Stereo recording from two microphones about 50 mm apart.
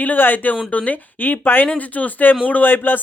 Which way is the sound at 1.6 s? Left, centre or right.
Left.